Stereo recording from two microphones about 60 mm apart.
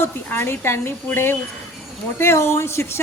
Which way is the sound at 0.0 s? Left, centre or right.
Left.